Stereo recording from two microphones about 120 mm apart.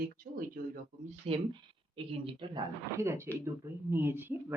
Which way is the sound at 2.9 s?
25° right (ahead or behind).